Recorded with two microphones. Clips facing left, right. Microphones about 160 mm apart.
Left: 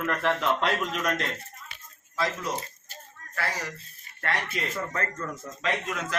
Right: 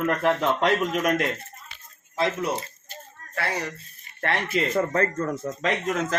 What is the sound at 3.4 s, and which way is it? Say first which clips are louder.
A man's voice: right 4 dB; 25° right (ahead or behind).